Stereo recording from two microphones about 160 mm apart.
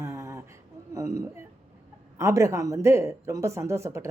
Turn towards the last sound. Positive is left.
turn(degrees=-20)  # may be behind; listen again after turning